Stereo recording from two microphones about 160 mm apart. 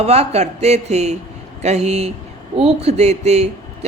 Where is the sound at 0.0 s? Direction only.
40° right (ahead or behind).